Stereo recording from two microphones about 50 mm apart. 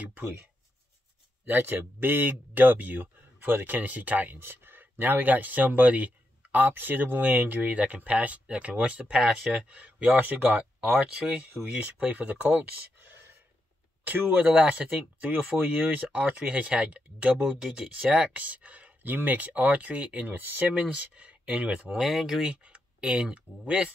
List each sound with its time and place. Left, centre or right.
0.0 s speech: right
1.5 s speech: right
4.4 s speech: right
10.2 s speech: right
10.6 s speech: right
11.6 s speech: right
17.4 s speech: centre; by 20.6 s right
20.7 s speech: right
22.0 s speech: centre
22.5 s speech: right